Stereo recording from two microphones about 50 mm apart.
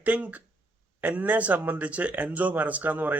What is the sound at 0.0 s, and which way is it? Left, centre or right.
A man's voice, right.